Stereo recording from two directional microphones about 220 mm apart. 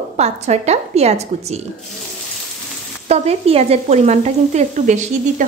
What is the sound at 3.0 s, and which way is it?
Sizzle, 30° right (ahead or behind).